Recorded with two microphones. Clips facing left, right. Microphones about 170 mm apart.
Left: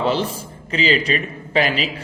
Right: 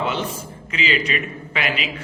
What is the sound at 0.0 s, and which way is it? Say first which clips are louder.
A man's voice: left 4 dB; 35° left (ahead or behind).